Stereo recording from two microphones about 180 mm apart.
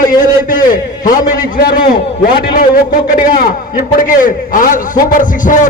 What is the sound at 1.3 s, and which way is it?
A man's voice, 50° left (ahead or behind).